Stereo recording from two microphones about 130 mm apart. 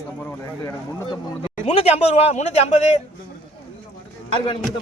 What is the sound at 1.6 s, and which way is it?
Speech, 55° left (ahead or behind).